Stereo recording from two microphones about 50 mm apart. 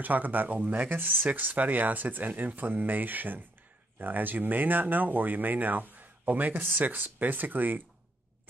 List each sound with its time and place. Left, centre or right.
0.0 s speech: right
0.8 s speech: right